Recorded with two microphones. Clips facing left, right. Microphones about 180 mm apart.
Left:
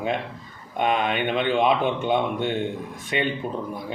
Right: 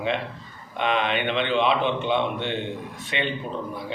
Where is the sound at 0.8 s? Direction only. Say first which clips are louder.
Left 1 dB; 45° left (ahead or behind).